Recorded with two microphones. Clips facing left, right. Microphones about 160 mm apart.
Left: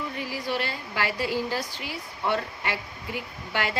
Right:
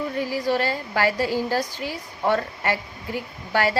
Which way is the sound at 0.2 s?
40° right (ahead or behind).